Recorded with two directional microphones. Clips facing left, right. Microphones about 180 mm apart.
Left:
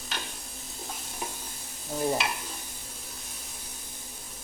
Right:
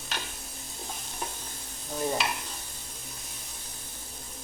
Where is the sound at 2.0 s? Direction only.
5° left (ahead or behind).